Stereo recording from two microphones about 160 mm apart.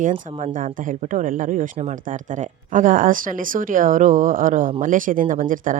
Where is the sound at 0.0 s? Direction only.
50° right (ahead or behind).